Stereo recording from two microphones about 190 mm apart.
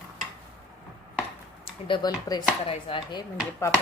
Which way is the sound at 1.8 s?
25° left (ahead or behind).